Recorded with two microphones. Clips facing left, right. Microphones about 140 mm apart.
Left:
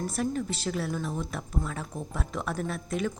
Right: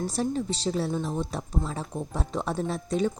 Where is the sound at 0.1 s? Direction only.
30° right (ahead or behind).